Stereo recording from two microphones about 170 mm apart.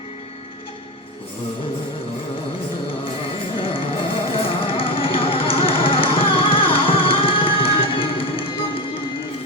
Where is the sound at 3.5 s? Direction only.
30° left (ahead or behind).